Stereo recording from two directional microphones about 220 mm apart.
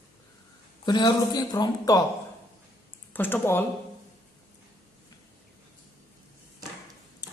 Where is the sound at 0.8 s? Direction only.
20° left (ahead or behind).